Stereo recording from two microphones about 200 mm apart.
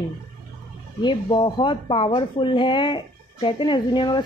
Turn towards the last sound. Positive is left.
turn(degrees=25)  # may be behind; listen again after turning